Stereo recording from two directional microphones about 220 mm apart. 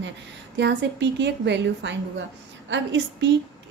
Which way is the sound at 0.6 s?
50° right (ahead or behind).